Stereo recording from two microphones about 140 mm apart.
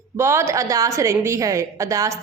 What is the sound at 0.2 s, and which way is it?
A woman's voice, 20° right (ahead or behind).